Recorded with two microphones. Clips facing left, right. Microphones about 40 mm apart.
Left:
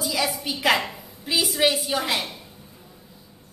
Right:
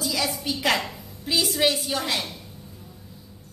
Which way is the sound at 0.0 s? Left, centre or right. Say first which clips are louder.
Left 1 dB; centre.